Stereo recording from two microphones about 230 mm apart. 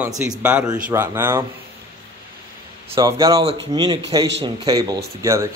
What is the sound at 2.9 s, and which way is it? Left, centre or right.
Speech, centre.